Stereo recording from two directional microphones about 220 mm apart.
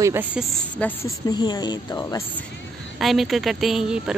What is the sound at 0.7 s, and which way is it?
Speech, 10° left (ahead or behind).